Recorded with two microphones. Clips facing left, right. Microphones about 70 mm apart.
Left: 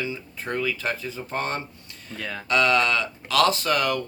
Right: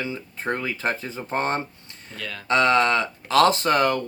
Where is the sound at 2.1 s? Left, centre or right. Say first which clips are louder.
Left 2 dB; left.